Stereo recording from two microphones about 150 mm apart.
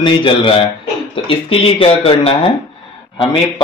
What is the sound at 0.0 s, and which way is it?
Speech, 30° left (ahead or behind).